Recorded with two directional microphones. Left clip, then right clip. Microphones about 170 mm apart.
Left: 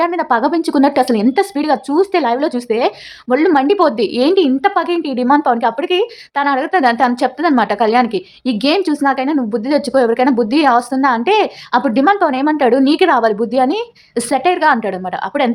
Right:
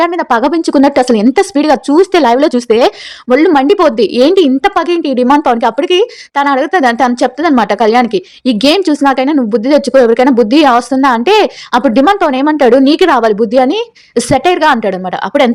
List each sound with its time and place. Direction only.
0.0 s speech: 30° right (ahead or behind)